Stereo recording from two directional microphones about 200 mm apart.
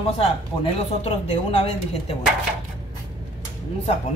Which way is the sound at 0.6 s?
30° left (ahead or behind).